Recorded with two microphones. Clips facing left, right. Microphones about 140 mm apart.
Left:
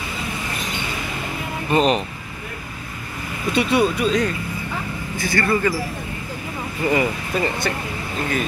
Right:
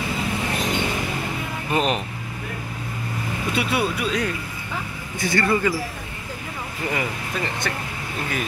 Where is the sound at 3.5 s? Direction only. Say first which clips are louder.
Left 6 dB; 5° right (ahead or behind).